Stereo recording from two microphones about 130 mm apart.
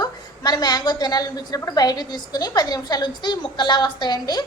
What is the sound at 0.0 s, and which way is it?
A woman's voice, 30° left (ahead or behind).